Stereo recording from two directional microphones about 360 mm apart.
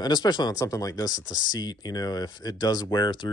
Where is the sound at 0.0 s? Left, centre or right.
Centre.